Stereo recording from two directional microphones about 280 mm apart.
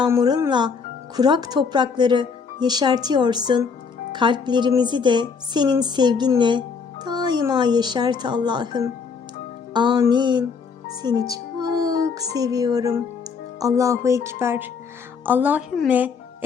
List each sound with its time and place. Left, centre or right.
0.0 s a woman's voice: centre